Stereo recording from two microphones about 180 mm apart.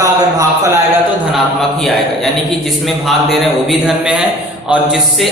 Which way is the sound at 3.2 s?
Centre (ahead or behind).